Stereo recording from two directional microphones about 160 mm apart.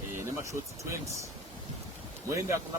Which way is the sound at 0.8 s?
20° right (ahead or behind).